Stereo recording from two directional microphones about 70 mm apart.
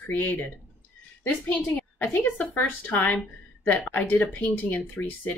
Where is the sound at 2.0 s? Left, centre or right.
Left.